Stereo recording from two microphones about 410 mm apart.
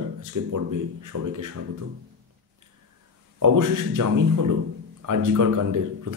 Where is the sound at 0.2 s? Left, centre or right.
Right.